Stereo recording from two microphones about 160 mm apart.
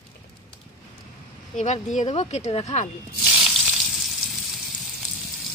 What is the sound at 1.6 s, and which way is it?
Speech, 50° left (ahead or behind).